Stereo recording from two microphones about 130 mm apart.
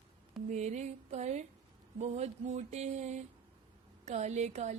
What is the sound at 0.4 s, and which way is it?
Speech, 65° right (ahead or behind).